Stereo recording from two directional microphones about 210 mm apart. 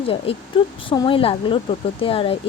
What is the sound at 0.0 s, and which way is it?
Speech, 25° left (ahead or behind).